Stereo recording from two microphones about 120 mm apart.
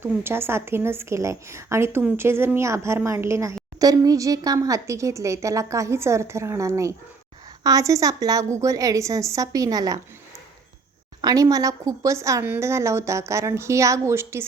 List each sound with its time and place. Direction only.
0.0 s a woman's voice: 20° right (ahead or behind)
11.2 s a woman's voice: 30° right (ahead or behind)